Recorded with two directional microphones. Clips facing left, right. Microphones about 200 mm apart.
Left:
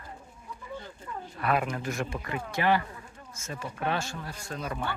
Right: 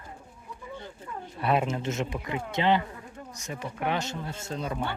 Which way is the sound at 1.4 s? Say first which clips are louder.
Right 2 dB; 25° right (ahead or behind).